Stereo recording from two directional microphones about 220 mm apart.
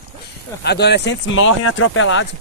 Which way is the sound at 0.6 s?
50° left (ahead or behind).